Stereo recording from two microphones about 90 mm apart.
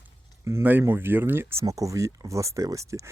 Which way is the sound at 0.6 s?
20° right (ahead or behind).